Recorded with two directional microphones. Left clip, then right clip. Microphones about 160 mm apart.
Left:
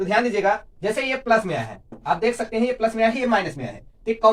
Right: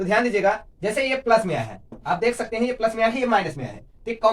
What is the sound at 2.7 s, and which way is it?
Speech, 30° right (ahead or behind).